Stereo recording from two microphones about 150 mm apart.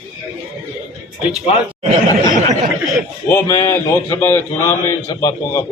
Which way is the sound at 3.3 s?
20° left (ahead or behind).